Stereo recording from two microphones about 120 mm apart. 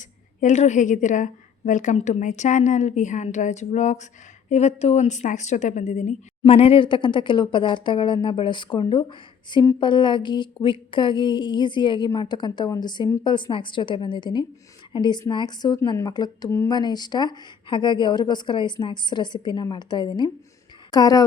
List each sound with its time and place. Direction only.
0.0 s a woman's voice: 90° left
6.5 s speech: 55° left (ahead or behind)
9.8 s a sound: 40° left (ahead or behind)